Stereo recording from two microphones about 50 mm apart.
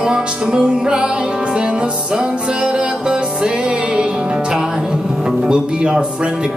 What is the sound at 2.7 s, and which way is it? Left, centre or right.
Music, centre.